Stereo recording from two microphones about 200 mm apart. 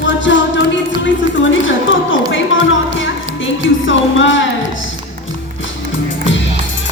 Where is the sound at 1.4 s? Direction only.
70° left (ahead or behind).